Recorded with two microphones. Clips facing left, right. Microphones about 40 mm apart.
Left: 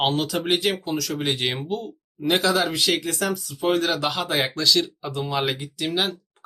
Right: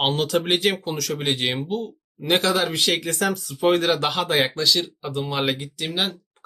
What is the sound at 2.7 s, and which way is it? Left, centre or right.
Speech, right.